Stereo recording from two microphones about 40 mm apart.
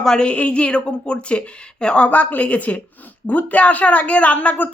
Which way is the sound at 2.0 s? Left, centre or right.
Left.